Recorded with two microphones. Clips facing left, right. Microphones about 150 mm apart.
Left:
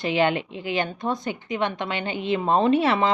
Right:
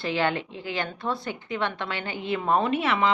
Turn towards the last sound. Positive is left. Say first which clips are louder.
# left 4 dB
turn(degrees=35)  # may be behind; listen again after turning